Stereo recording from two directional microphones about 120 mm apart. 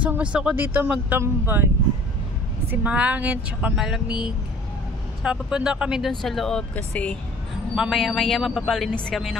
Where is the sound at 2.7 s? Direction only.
10° right (ahead or behind); by 7.1 s 10° left (ahead or behind).